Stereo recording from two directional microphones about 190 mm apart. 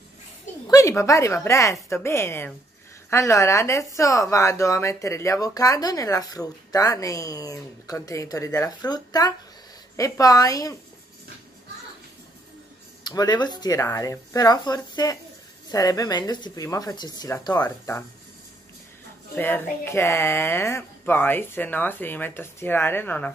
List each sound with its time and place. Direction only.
0.7 s speech: 15° left (ahead or behind)
13.0 s speech: 20° left (ahead or behind)
19.3 s speech: 10° left (ahead or behind)